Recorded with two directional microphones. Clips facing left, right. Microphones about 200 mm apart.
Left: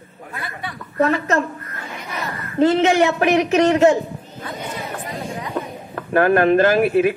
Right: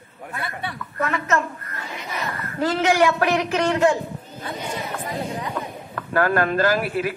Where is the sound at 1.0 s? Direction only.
30° left (ahead or behind).